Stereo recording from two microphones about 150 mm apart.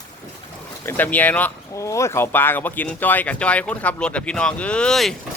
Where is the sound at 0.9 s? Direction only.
10° left (ahead or behind).